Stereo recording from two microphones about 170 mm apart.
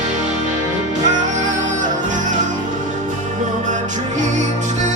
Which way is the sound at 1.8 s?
50° right (ahead or behind).